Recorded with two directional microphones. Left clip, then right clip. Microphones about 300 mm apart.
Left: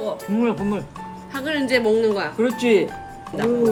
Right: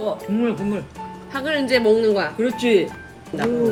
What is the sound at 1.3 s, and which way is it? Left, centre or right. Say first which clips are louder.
Speech: right 1 dB; centre.